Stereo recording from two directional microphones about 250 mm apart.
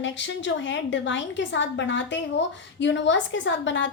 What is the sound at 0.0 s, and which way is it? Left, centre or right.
A woman's voice, left.